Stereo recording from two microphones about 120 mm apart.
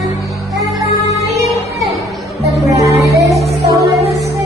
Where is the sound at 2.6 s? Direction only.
25° right (ahead or behind).